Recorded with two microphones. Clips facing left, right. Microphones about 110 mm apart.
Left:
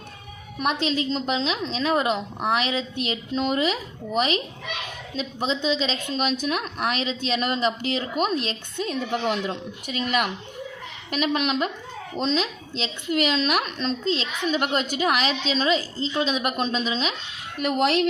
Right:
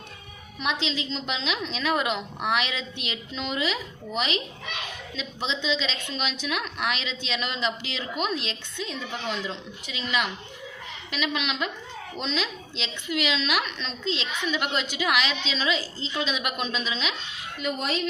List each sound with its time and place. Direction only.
0.6 s a woman's voice: 45° left (ahead or behind)
17.6 s speech: 70° left (ahead or behind)